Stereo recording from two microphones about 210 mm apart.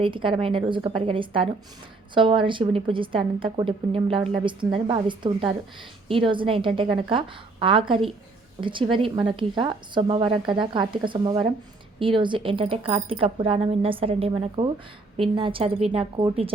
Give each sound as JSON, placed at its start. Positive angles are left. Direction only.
{"t": 0.0, "sound": "a woman's voice", "side_deg": -25}